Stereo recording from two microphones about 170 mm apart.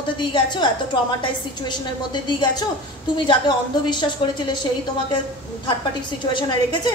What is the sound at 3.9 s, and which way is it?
Speech, 25° left (ahead or behind).